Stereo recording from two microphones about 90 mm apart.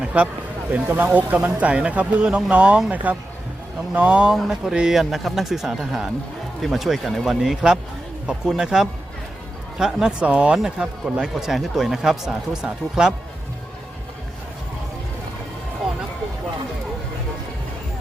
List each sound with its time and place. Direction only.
0.0 s a sound: 15° right (ahead or behind)
0.7 s speech: 20° right (ahead or behind)
4.4 s a man's voice: 5° right (ahead or behind)